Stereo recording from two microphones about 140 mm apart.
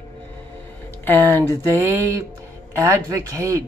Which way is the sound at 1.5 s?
20° right (ahead or behind).